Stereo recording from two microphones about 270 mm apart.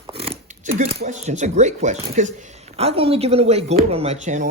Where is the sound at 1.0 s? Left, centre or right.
Right.